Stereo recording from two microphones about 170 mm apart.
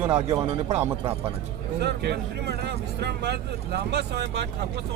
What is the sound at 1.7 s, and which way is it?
Speech, 80° right.